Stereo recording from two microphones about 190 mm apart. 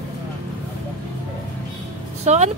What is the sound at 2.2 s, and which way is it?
Speech, 35° right (ahead or behind).